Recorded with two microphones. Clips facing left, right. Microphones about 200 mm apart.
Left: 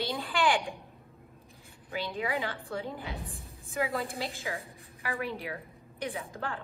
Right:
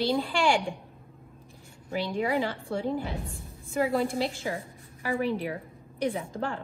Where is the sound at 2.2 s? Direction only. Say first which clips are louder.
Right 6 dB; 30° right (ahead or behind).